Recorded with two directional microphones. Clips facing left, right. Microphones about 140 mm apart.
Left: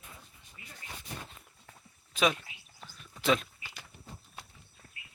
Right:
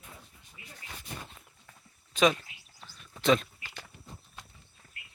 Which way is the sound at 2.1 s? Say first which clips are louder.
Right 4 dB; 5° left (ahead or behind).